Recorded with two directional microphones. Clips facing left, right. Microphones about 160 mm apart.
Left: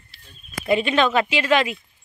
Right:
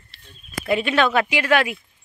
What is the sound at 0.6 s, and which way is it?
Speech, 5° right (ahead or behind).